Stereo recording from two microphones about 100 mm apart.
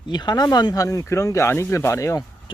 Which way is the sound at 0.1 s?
45° left (ahead or behind).